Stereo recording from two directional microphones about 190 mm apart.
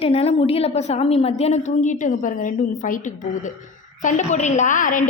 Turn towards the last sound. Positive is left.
turn(degrees=45)  # may be behind; listen again after turning